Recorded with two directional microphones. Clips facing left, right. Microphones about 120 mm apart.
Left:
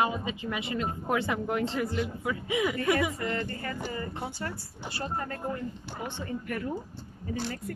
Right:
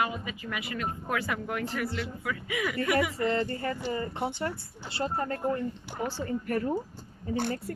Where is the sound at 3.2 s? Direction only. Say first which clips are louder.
Right 4 dB; 30° right (ahead or behind).